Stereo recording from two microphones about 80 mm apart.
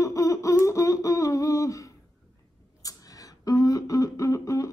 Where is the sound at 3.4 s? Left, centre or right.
Left.